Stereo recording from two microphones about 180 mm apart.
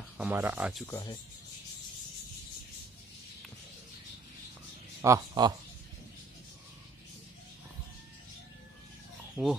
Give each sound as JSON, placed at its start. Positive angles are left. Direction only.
{"t": 0.2, "sound": "speech", "side_deg": -10}
{"t": 0.8, "sound": "speech", "side_deg": 15}
{"t": 5.0, "sound": "speech", "side_deg": -20}
{"t": 9.4, "sound": "fowl", "side_deg": -15}